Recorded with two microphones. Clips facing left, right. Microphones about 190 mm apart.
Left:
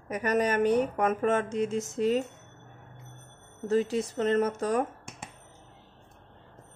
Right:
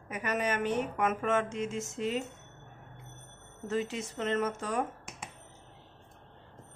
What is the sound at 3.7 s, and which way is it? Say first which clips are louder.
A woman's voice: left 7 dB; 35° left (ahead or behind).